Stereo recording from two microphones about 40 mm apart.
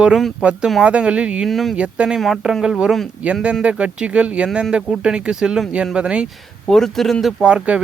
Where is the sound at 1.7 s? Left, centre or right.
Right.